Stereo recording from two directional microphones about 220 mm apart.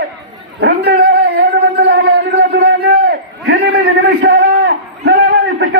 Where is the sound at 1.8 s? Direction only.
50° right (ahead or behind).